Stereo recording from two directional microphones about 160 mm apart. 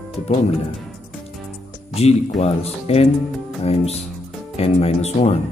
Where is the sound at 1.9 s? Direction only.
40° left (ahead or behind).